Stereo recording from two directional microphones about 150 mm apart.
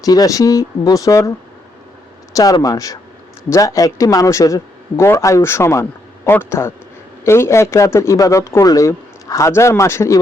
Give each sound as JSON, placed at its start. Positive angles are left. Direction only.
{"t": 0.0, "sound": "a man's voice", "side_deg": 25}
{"t": 2.3, "sound": "a man's voice", "side_deg": 25}